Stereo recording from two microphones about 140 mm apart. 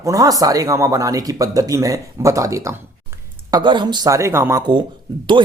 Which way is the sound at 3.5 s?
35° right (ahead or behind).